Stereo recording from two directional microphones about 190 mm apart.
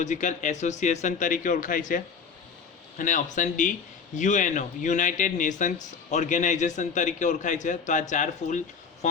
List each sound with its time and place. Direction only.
0.0 s a man's voice: 40° left (ahead or behind)
3.0 s a man's voice: 40° left (ahead or behind)